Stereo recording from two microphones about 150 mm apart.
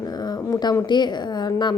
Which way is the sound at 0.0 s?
25° left (ahead or behind).